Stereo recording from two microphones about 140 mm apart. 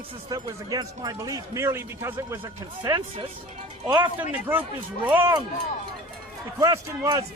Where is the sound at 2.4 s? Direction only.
35° right (ahead or behind).